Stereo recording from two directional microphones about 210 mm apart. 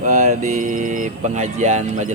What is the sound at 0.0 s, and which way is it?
Speech, 35° right (ahead or behind).